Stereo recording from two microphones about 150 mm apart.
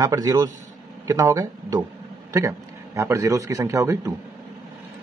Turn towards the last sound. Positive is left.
turn(degrees=-20)  # may be behind; listen again after turning